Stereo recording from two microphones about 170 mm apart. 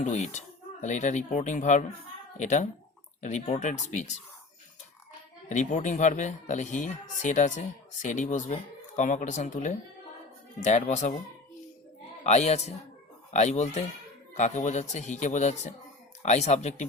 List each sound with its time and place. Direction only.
0.0 s speech: 45° left (ahead or behind)
5.5 s speech: 45° left (ahead or behind)
12.2 s speech: 40° left (ahead or behind)